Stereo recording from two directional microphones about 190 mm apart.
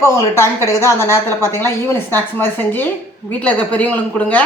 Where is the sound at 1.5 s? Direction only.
15° left (ahead or behind).